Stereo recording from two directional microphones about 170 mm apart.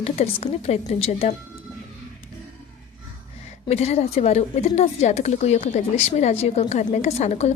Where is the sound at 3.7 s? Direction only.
40° left (ahead or behind).